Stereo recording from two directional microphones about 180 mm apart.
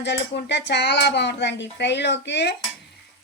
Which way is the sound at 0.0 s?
75° left (ahead or behind).